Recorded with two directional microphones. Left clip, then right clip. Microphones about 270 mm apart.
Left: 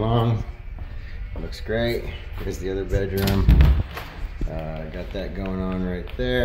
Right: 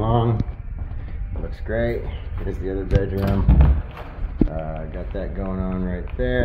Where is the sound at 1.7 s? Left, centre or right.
Centre.